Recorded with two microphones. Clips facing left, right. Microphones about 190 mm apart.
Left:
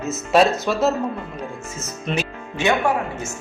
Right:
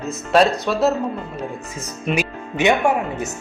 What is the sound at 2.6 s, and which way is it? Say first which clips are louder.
Speech: right 2 dB; 20° right (ahead or behind).